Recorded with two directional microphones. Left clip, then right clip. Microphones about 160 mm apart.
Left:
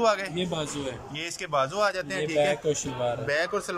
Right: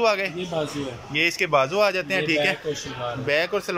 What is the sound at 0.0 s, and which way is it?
A man's voice, 10° right (ahead or behind).